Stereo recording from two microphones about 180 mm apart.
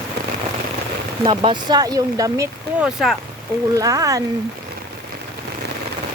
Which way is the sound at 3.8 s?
20° right (ahead or behind).